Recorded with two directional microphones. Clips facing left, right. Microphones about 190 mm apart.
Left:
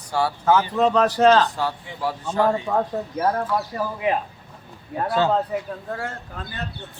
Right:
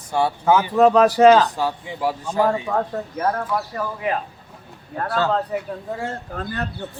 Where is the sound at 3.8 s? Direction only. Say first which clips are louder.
Left 1 dB; 20° left (ahead or behind).